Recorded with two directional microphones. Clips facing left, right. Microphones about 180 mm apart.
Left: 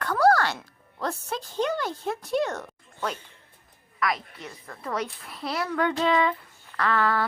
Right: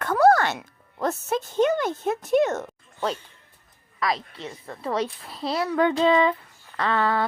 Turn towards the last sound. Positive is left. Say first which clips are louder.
# right 1 dB
turn(degrees=-25)  # may be behind; listen again after turning